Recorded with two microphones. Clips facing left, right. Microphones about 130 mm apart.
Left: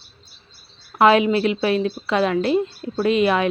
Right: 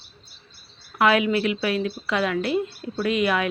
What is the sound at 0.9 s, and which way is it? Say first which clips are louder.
A woman's voice: left 5 dB; 30° left (ahead or behind).